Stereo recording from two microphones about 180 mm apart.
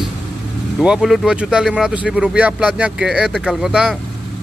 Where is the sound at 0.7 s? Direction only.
5° right (ahead or behind).